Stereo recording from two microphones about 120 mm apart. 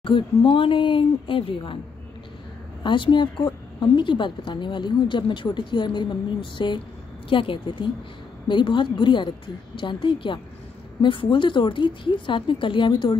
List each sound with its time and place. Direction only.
0.0 s speech: 50° left (ahead or behind)
2.8 s a woman's voice: 40° left (ahead or behind)